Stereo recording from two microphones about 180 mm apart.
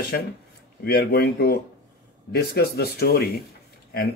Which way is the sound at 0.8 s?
65° left (ahead or behind).